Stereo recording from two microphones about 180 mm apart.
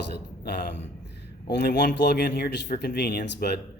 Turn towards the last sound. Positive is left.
turn(degrees=70)  # may be behind; listen again after turning